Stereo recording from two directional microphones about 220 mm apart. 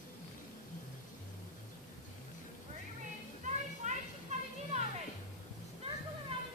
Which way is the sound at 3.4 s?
35° right (ahead or behind).